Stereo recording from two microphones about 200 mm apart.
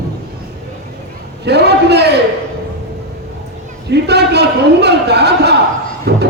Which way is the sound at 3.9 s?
55° right (ahead or behind).